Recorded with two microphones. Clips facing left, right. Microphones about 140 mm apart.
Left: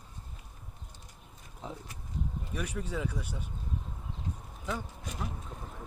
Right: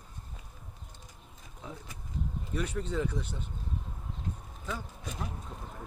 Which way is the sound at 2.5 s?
10° left (ahead or behind).